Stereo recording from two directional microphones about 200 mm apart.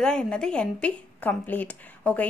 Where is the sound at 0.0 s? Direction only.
5° left (ahead or behind).